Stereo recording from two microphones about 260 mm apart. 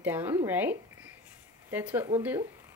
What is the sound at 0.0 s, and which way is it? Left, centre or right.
Speech, centre.